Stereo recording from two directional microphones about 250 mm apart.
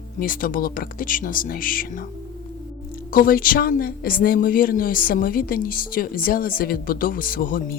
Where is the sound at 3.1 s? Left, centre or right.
Left.